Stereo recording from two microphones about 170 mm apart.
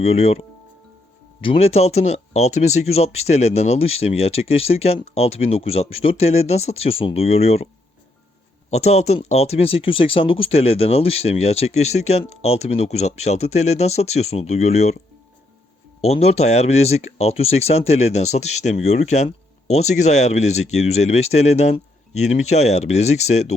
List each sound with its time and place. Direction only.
0.0 s speech: 35° left (ahead or behind)
8.7 s speech: 40° left (ahead or behind)
16.0 s speech: 40° left (ahead or behind)